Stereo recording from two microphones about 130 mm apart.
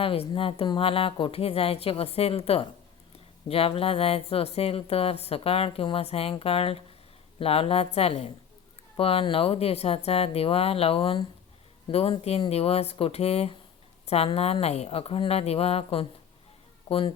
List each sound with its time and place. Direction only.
0.0 s a woman's voice: 45° left (ahead or behind)